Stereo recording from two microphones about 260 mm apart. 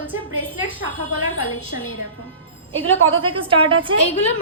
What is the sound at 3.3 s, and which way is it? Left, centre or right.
Speech, centre.